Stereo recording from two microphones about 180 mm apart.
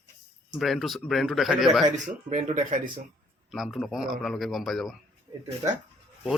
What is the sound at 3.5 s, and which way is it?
Speech, centre (ahead or behind).